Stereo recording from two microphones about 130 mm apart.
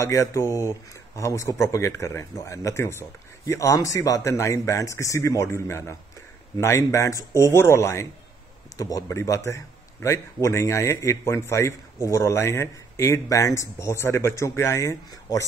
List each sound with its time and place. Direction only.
0.0 s speech: 25° left (ahead or behind)